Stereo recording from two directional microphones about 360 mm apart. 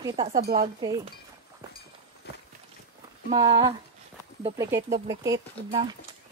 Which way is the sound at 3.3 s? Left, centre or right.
Centre.